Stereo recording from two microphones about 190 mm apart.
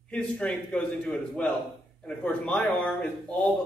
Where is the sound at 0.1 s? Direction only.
5° left (ahead or behind).